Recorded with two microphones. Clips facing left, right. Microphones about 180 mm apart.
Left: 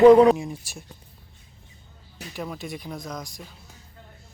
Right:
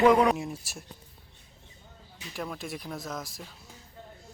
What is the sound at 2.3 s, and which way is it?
Speech, centre (ahead or behind).